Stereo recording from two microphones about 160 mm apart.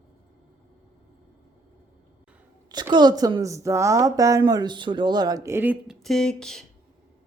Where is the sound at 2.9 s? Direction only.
25° right (ahead or behind); by 6.7 s 5° left (ahead or behind).